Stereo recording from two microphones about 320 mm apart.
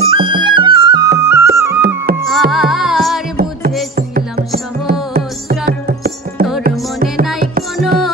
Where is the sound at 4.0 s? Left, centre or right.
Right.